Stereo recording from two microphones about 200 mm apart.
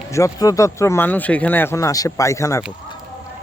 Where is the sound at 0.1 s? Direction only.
15° left (ahead or behind).